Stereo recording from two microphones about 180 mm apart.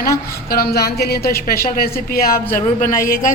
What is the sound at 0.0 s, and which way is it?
A woman's voice, 55° left (ahead or behind).